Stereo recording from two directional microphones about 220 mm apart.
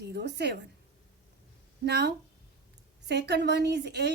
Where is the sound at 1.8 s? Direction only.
50° right (ahead or behind).